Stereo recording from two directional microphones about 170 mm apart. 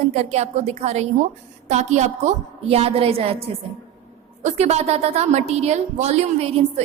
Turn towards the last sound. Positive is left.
turn(degrees=-40)  # may be behind; listen again after turning